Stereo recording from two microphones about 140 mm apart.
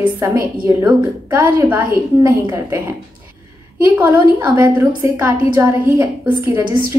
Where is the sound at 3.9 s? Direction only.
15° right (ahead or behind).